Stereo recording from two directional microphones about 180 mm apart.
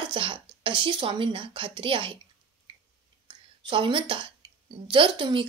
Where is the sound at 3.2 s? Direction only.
25° right (ahead or behind).